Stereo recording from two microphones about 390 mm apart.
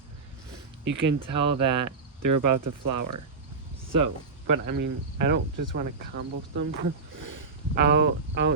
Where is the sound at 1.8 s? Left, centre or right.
Right.